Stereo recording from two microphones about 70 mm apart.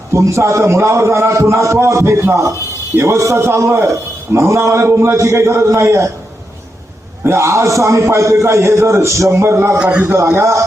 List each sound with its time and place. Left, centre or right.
0.1 s a man's voice: right
7.3 s a man's voice: right
9.7 s a man's voice: centre
10.2 s a man's voice: right